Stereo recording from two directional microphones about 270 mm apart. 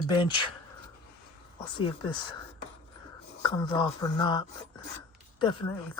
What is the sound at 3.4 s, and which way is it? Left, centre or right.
Speech, centre.